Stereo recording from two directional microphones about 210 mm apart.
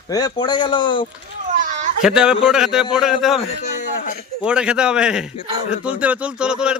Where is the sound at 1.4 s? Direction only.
35° right (ahead or behind).